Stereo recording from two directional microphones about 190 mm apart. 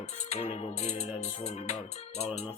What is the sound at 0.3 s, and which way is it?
Music, 35° left (ahead or behind).